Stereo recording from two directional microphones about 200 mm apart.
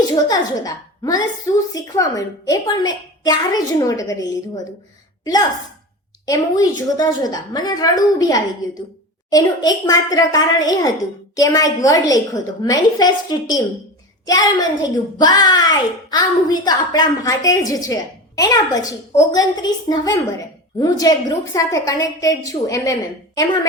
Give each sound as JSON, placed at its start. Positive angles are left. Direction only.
{"t": 0.3, "sound": "a woman's voice", "side_deg": 20}
{"t": 14.3, "sound": "a child's voice", "side_deg": 20}